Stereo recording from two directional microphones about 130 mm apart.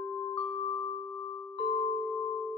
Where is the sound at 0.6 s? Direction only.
40° left (ahead or behind).